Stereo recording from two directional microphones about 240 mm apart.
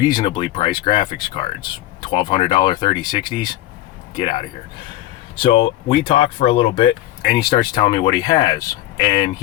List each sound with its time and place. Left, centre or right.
0.0 s speech: centre